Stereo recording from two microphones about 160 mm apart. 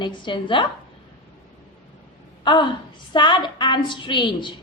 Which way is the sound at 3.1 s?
30° left (ahead or behind).